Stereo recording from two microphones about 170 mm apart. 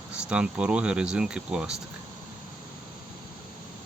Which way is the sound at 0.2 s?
5° right (ahead or behind).